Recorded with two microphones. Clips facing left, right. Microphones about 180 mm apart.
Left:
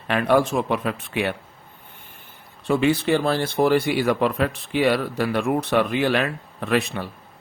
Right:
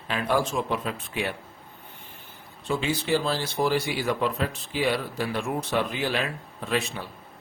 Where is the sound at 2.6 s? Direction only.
60° left (ahead or behind).